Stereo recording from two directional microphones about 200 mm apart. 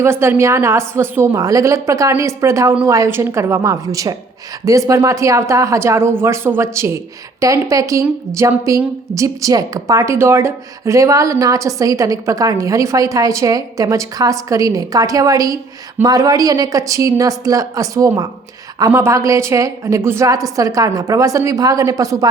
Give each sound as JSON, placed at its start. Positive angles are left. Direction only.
{"t": 0.0, "sound": "speech", "side_deg": -10}